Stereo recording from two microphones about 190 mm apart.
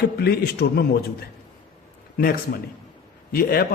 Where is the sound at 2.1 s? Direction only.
50° left (ahead or behind).